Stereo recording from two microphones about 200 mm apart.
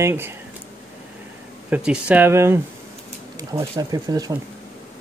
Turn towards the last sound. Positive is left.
turn(degrees=-20)  # may be behind; listen again after turning